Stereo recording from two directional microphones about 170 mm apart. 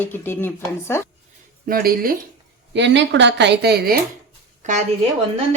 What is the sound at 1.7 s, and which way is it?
Speech, 60° right (ahead or behind).